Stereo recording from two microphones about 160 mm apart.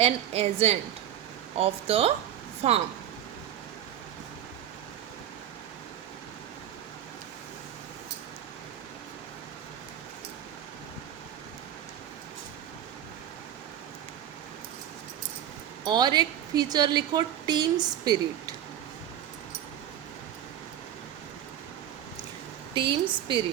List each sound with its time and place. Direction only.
0.0 s a woman's voice: 40° right (ahead or behind)
15.8 s a woman's voice: 25° right (ahead or behind)
22.7 s a woman's voice: 30° right (ahead or behind)